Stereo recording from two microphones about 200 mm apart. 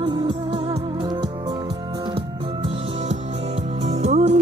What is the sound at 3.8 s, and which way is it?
Music, 35° right (ahead or behind).